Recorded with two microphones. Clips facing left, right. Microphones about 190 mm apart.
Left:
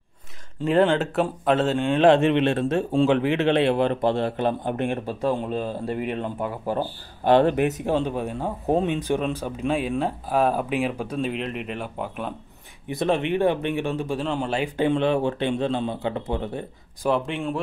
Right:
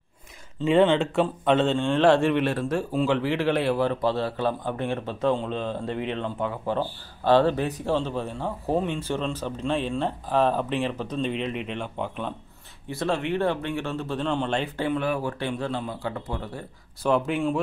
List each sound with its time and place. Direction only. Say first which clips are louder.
0.7 s speech: even; centre (ahead or behind)
1.9 s speech: left 4 dB; 20° left (ahead or behind)
12.8 s speech: left 4 dB; 20° left (ahead or behind)
14.8 s speech: left 8 dB; 25° left (ahead or behind)
17.0 s speech: right 1 dB; centre (ahead or behind)